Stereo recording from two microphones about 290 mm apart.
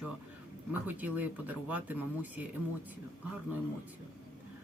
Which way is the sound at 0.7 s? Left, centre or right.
Centre.